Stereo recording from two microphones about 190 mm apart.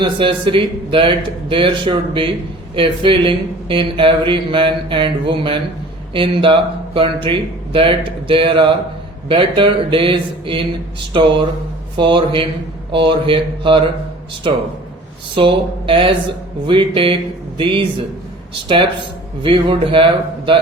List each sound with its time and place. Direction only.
0.0 s speech: 25° right (ahead or behind)
19.4 s speech: 25° right (ahead or behind)